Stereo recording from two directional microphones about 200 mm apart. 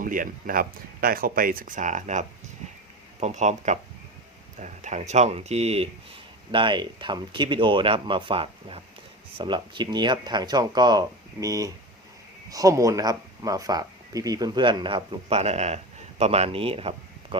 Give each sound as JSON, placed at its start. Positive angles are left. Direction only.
{"t": 0.0, "sound": "speech", "side_deg": -45}